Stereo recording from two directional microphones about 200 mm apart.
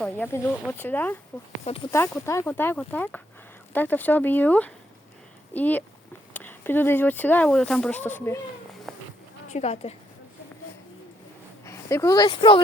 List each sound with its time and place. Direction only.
0.0 s speech: 10° left (ahead or behind)
1.6 s speech: 30° left (ahead or behind)
1.9 s speech: 15° left (ahead or behind)
8.9 s a sound: centre (ahead or behind)
9.5 s a woman's voice: 35° left (ahead or behind)
11.6 s speech: 15° left (ahead or behind)